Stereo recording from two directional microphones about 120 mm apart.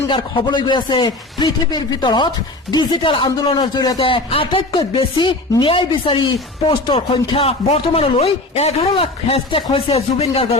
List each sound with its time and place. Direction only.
0.1 s speech: 45° left (ahead or behind)
3.9 s speech: 50° left (ahead or behind)